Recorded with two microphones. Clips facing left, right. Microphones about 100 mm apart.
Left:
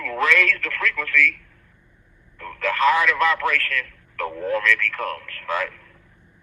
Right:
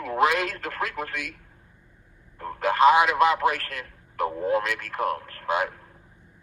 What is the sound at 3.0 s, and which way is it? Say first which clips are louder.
Speech: right 1 dB; 20° right (ahead or behind).